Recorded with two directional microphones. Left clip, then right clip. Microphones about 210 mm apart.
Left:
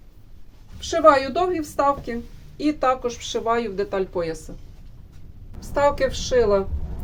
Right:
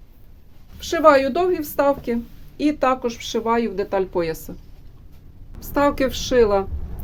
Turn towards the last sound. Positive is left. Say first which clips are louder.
# right 2 dB
turn(degrees=-50)  # may be behind; listen again after turning